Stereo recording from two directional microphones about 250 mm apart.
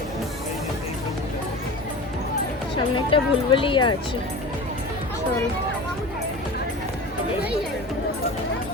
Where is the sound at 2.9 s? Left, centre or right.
Left.